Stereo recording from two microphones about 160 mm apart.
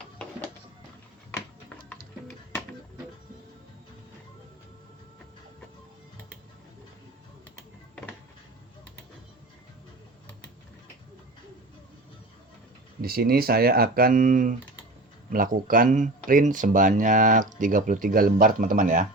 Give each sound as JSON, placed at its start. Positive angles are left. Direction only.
{"t": 13.0, "sound": "speech", "side_deg": -70}